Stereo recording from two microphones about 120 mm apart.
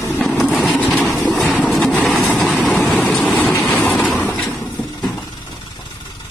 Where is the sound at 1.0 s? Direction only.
Centre (ahead or behind).